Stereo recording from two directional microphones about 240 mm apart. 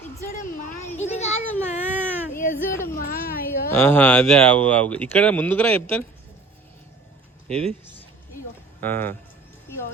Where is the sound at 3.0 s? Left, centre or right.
Left.